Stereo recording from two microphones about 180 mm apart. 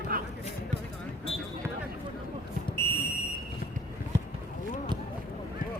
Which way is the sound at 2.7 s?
15° left (ahead or behind).